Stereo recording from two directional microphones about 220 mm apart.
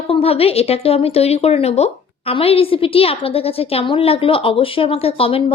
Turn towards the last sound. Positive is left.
turn(degrees=25)  # may be behind; listen again after turning